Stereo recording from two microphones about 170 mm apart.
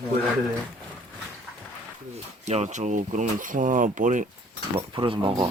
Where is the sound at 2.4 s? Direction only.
40° right (ahead or behind).